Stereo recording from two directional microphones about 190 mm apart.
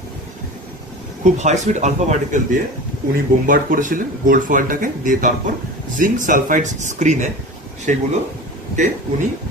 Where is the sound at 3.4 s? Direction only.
45° right (ahead or behind).